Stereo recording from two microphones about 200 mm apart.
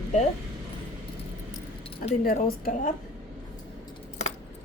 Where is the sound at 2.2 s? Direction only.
45° left (ahead or behind).